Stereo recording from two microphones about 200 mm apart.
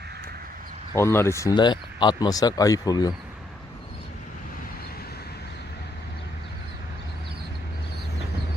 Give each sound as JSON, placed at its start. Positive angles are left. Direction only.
{"t": 0.9, "sound": "speech", "side_deg": 10}